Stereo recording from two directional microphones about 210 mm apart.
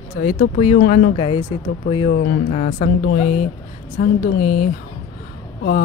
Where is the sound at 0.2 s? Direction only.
45° left (ahead or behind).